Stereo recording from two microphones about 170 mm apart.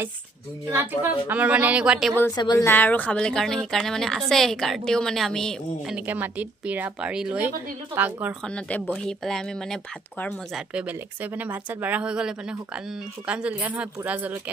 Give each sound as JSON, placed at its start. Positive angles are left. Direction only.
{"t": 0.7, "sound": "a woman's voice", "side_deg": -10}
{"t": 2.3, "sound": "speech", "side_deg": 25}
{"t": 2.7, "sound": "a woman's voice", "side_deg": 10}
{"t": 6.0, "sound": "a woman's voice", "side_deg": -10}
{"t": 8.5, "sound": "a woman's voice", "side_deg": 10}
{"t": 10.7, "sound": "a woman's voice", "side_deg": -10}